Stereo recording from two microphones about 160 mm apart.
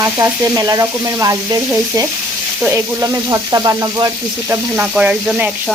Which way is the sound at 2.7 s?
20° right (ahead or behind).